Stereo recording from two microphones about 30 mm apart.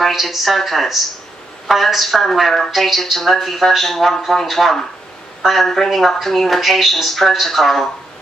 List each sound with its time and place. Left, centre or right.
0.1 s a woman's voice: centre